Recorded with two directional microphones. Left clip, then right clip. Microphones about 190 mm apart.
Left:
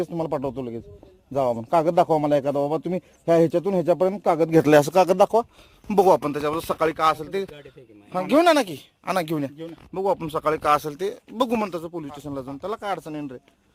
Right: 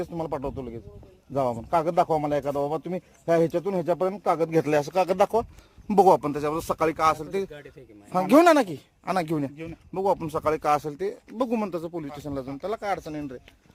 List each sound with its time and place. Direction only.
0.0 s a man's voice: 65° left (ahead or behind)
5.0 s speech: 35° left (ahead or behind)
5.9 s speech: centre (ahead or behind)
8.1 s speech: 25° right (ahead or behind); by 13.4 s 25° left (ahead or behind)